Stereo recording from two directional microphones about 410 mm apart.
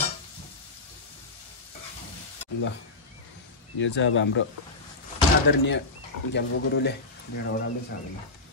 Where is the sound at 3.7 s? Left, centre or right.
Left.